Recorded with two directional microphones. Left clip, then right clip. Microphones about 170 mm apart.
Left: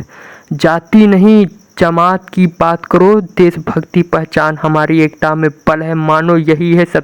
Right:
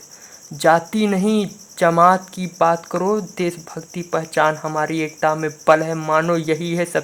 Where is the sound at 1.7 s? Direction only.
35° left (ahead or behind).